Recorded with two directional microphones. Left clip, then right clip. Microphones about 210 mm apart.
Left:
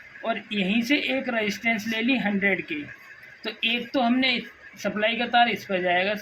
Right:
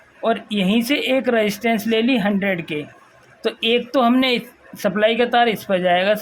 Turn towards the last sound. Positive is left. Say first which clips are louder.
# right 7 dB
turn(degrees=-55)  # may be behind; listen again after turning